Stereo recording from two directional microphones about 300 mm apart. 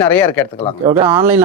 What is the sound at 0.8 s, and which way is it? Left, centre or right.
Speech, centre.